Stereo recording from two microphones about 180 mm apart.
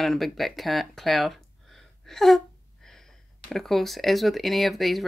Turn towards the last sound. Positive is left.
turn(degrees=0)  # may be behind; listen again after turning